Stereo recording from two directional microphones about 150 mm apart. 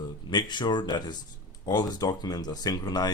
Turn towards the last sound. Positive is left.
turn(degrees=25)  # may be behind; listen again after turning